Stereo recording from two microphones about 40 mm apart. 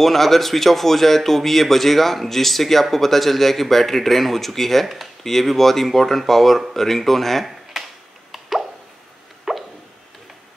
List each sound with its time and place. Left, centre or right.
0.0 s speech: centre
8.3 s plop: centre
9.5 s a sound: centre